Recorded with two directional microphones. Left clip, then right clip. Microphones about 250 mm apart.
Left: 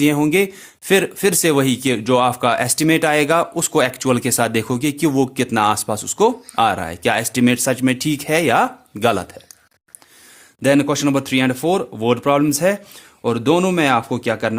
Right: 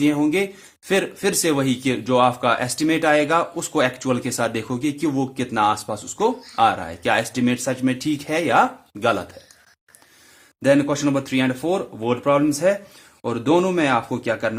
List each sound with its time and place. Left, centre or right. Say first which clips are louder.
0.0 s speech: left 4 dB; left
10.6 s speech: left 2 dB; left